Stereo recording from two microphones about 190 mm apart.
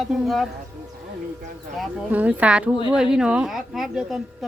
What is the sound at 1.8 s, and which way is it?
Speech, 5° right (ahead or behind).